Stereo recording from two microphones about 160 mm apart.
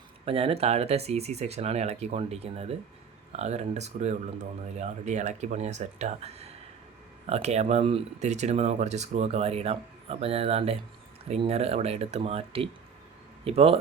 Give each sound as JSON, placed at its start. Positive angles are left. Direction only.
{"t": 0.3, "sound": "speech", "side_deg": -40}